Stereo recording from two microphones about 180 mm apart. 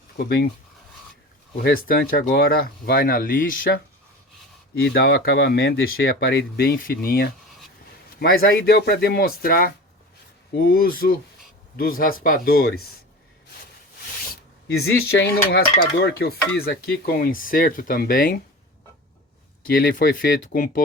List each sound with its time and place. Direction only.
0.2 s speech: 60° left (ahead or behind)
1.5 s speech: 55° left (ahead or behind)
4.8 s speech: 65° left (ahead or behind)
14.7 s speech: 70° left (ahead or behind); by 18.3 s 50° left (ahead or behind)
19.7 s speech: 50° left (ahead or behind)